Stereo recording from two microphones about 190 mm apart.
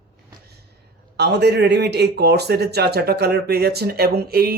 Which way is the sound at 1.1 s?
60° right (ahead or behind).